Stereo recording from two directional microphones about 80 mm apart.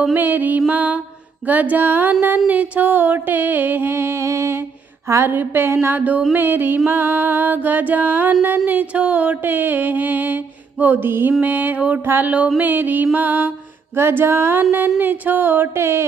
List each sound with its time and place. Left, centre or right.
0.1 s music: right